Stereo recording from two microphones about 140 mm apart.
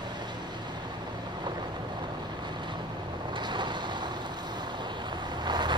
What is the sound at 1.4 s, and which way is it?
Vehicle, 30° right (ahead or behind).